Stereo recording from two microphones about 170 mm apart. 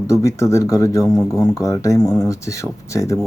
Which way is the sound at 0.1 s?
15° left (ahead or behind).